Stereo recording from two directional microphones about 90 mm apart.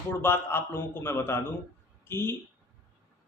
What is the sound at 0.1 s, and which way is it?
A man's voice, 25° left (ahead or behind).